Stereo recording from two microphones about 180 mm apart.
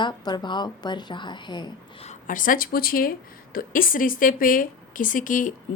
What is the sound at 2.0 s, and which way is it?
A woman's voice, 45° left (ahead or behind).